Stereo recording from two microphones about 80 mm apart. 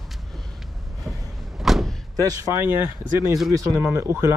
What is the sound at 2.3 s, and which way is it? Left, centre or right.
Speech, right.